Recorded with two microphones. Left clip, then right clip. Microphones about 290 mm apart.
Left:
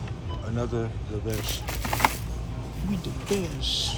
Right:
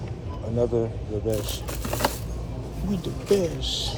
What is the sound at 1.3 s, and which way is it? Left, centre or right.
Speech, centre.